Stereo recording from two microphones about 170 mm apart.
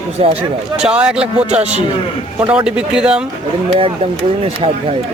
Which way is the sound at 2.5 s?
5° right (ahead or behind).